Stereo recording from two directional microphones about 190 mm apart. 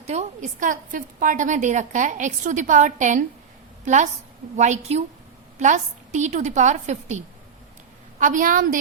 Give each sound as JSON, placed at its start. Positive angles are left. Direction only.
{"t": 0.1, "sound": "a woman's voice", "side_deg": -40}
{"t": 8.2, "sound": "a woman's voice", "side_deg": -45}